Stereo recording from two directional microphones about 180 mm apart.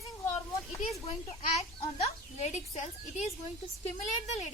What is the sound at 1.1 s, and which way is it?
A child's voice, 35° left (ahead or behind).